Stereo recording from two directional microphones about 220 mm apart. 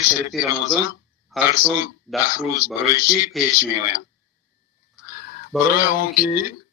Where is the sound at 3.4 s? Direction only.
Centre (ahead or behind).